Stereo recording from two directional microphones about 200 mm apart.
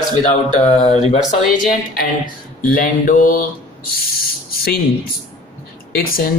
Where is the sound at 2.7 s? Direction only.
40° left (ahead or behind).